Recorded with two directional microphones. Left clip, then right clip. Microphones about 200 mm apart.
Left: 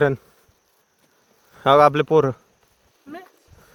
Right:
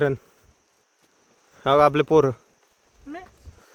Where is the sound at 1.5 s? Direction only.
20° left (ahead or behind).